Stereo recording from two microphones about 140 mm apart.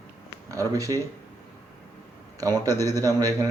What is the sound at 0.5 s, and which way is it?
Speech, 25° right (ahead or behind).